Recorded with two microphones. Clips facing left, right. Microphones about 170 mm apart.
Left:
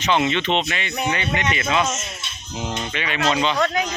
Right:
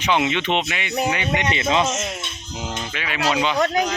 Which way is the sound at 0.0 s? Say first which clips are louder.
Even; 10° right (ahead or behind).